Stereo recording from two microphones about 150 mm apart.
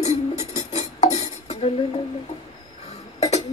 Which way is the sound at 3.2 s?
45° left (ahead or behind).